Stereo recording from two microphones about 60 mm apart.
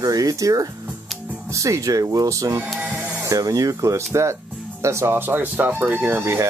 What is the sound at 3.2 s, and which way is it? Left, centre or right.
Speech, right.